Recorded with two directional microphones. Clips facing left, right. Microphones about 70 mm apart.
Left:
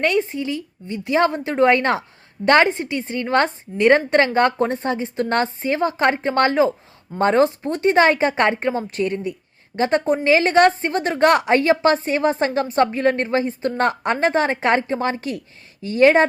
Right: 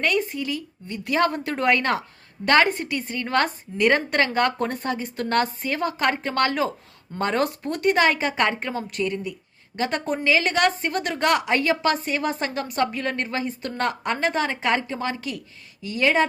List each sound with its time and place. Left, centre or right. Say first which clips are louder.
0.0 s a woman's voice: left 4 dB; left